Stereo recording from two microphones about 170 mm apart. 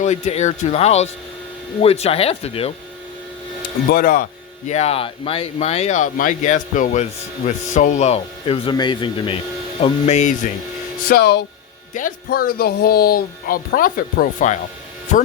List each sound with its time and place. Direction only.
0.0 s speech: 45° left (ahead or behind)
3.8 s speech: 55° left (ahead or behind); by 9.4 s 30° left (ahead or behind)
9.8 s speech: 45° left (ahead or behind)
11.1 s speech: 70° left (ahead or behind)
11.9 s speech: 55° left (ahead or behind)